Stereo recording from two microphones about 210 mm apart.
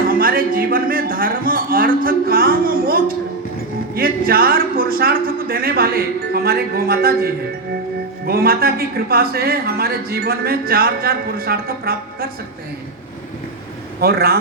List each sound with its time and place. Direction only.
0.1 s speech: 45° right (ahead or behind)
8.3 s speech: 45° right (ahead or behind)
14.0 s speech: 45° right (ahead or behind)